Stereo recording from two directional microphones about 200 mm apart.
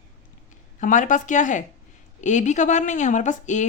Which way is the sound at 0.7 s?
40° left (ahead or behind).